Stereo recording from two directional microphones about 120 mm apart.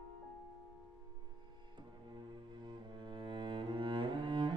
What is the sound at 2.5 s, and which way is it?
Cello, 40° right (ahead or behind).